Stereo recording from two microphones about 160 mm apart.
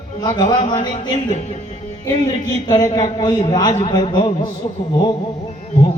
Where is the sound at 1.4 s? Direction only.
40° left (ahead or behind).